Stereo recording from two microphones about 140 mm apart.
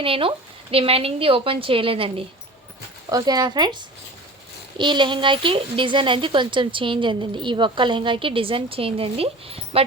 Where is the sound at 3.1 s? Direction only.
30° right (ahead or behind).